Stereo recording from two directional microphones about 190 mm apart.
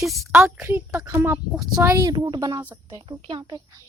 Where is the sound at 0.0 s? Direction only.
Centre (ahead or behind); by 3.6 s 25° right (ahead or behind).